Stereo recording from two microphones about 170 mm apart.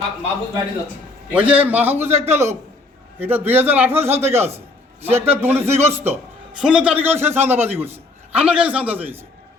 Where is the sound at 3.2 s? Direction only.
10° right (ahead or behind).